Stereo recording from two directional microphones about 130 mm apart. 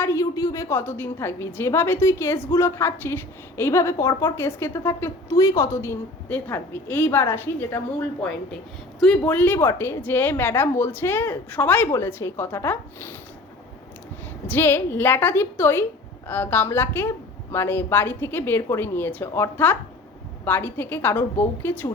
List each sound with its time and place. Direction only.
0.0 s a woman's voice: 20° left (ahead or behind)
14.4 s a woman's voice: 15° left (ahead or behind)